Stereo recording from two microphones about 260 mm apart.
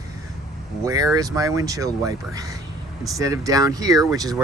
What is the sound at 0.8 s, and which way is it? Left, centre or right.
Speech, centre.